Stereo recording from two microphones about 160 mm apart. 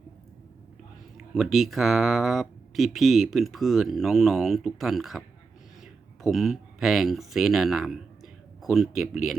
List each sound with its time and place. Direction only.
1.3 s speech: centre (ahead or behind)